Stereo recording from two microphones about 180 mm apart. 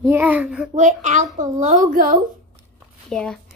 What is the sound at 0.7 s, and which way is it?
A woman's voice, 40° right (ahead or behind).